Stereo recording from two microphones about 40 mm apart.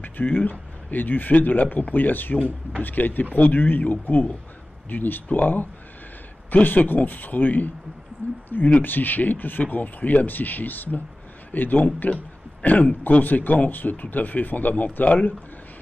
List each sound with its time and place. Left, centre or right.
0.0 s speech: left